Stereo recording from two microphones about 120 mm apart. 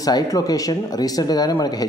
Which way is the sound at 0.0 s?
30° left (ahead or behind).